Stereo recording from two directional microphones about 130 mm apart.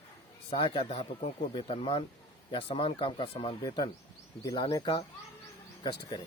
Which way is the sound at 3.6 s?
35° left (ahead or behind).